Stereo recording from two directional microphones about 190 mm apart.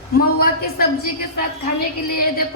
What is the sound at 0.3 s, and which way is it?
Speech, 55° left (ahead or behind).